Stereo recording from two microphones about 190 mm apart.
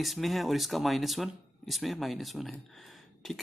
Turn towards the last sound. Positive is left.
turn(degrees=0)  # may be behind; listen again after turning